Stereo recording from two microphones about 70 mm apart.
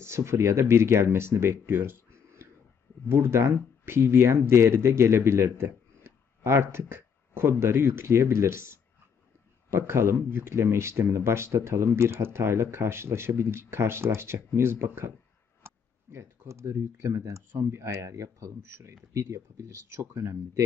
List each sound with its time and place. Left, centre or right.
0.0 s speech: right
15.6 s computer keyboard: right
16.7 s speech: right